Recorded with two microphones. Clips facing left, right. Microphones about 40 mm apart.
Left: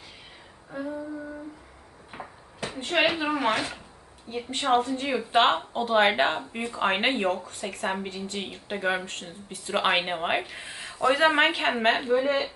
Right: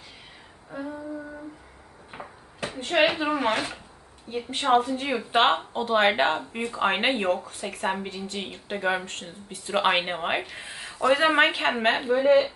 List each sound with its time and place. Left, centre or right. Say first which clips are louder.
0.7 s humming: left 1 dB; centre
2.1 s a sound: even; centre
4.3 s a woman's voice: right 2 dB; centre